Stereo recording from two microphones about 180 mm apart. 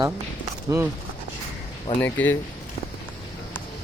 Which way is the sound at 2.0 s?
10° left (ahead or behind).